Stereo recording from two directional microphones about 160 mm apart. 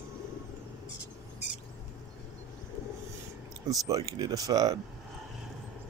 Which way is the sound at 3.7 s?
20° right (ahead or behind).